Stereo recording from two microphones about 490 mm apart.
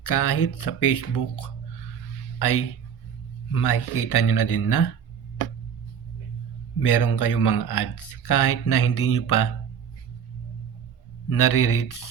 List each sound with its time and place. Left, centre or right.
0.0 s speech: left
3.5 s speech: left
6.8 s speech: left
11.3 s speech: left